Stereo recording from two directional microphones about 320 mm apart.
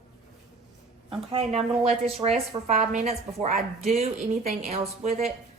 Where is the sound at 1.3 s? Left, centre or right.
Centre.